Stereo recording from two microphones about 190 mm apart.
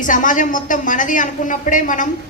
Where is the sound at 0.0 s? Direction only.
45° left (ahead or behind).